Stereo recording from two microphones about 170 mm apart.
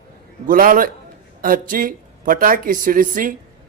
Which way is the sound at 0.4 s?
55° right (ahead or behind).